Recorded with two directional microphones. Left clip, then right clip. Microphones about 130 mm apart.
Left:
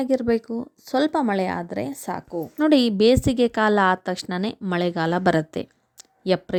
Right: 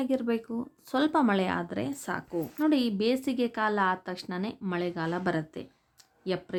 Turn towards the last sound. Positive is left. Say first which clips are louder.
# left 10 dB
turn(degrees=65)  # may be behind; listen again after turning